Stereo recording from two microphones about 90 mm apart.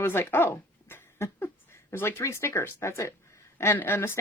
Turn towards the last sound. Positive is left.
turn(degrees=25)  # may be behind; listen again after turning